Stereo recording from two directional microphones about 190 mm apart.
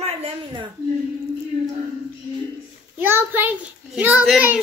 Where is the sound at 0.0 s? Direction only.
30° right (ahead or behind).